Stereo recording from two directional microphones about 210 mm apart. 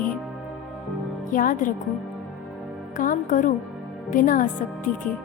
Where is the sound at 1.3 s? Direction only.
40° left (ahead or behind).